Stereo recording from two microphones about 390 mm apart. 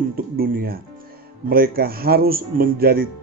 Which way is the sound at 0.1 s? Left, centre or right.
Right.